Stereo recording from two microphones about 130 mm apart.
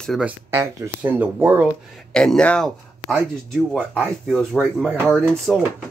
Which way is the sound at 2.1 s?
5° left (ahead or behind).